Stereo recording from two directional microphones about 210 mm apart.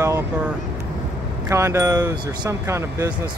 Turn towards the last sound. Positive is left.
turn(degrees=-15)  # may be behind; listen again after turning